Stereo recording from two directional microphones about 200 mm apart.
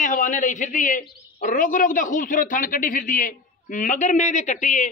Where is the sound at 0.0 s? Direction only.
40° left (ahead or behind).